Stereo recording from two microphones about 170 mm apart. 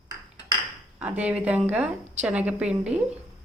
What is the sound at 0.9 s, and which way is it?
A woman's voice, 10° right (ahead or behind).